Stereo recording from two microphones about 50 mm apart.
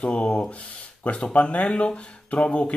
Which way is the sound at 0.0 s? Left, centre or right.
Left.